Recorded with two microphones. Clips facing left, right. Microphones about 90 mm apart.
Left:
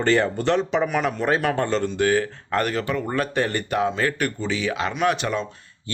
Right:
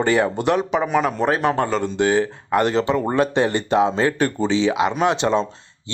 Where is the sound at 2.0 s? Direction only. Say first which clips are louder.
Right 4 dB; 20° right (ahead or behind).